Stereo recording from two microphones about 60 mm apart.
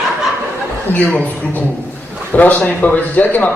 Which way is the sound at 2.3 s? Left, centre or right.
Left.